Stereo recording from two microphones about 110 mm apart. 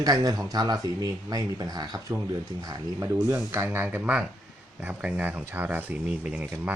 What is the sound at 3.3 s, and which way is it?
Speech, 25° right (ahead or behind).